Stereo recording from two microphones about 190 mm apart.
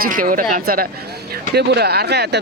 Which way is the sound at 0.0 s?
50° right (ahead or behind).